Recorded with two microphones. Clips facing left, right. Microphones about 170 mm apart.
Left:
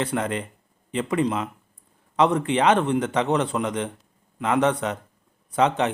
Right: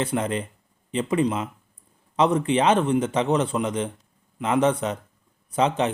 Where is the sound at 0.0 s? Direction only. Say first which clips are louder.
Right 1 dB; 20° right (ahead or behind).